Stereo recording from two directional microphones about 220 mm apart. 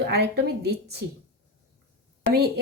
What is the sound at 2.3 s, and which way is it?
Speech, 45° right (ahead or behind).